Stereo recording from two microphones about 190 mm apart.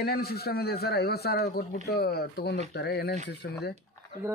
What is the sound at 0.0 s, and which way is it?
A man's voice, 55° left (ahead or behind).